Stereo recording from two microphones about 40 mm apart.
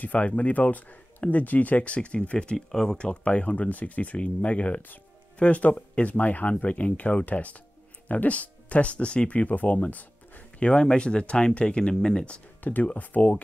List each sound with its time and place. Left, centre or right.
0.0 s speech: left
10.6 s speech: left
12.6 s speech: left